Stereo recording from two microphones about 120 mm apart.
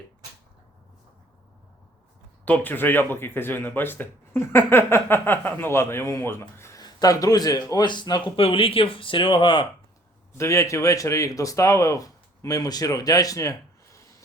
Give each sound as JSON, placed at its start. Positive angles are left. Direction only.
{"t": 2.4, "sound": "speech", "side_deg": 15}
{"t": 6.6, "sound": "a sound", "side_deg": 25}
{"t": 6.8, "sound": "speech", "side_deg": 30}
{"t": 8.4, "sound": "speech", "side_deg": 50}
{"t": 10.3, "sound": "speech", "side_deg": 25}